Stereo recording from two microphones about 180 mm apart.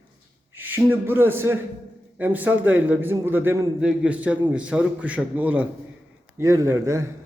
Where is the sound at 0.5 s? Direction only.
10° right (ahead or behind).